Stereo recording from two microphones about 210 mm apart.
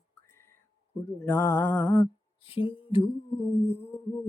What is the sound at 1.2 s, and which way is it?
Mantra, 10° left (ahead or behind).